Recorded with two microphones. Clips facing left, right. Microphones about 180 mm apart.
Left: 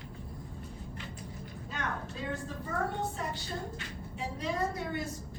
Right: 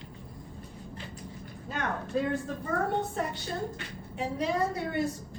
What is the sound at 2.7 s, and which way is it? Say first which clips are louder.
Speech: right 5 dB; 60° right (ahead or behind).